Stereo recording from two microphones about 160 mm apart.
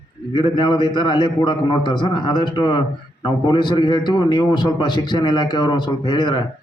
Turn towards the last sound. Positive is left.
turn(degrees=30)  # may be behind; listen again after turning